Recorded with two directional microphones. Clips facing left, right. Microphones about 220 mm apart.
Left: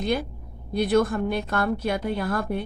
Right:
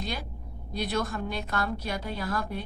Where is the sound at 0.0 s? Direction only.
55° left (ahead or behind).